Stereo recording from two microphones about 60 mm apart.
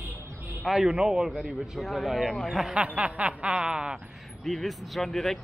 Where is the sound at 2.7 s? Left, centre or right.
Right.